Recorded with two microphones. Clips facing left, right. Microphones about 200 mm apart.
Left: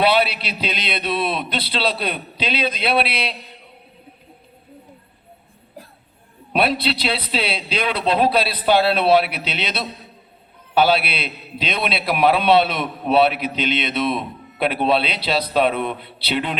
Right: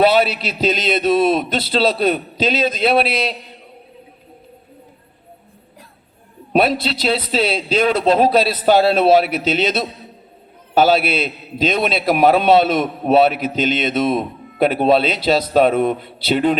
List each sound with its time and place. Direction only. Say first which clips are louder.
0.0 s a man's voice: right 4 dB; 45° right (ahead or behind)
6.5 s a man's voice: right 3 dB; 45° right (ahead or behind)